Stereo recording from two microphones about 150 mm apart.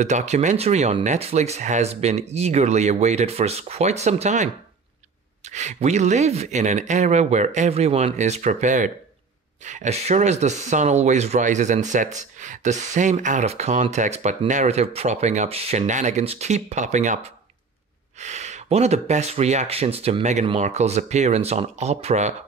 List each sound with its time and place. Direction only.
0.0 s speech: 50° right (ahead or behind)
5.5 s speech: 50° right (ahead or behind)
18.2 s speech: 50° right (ahead or behind)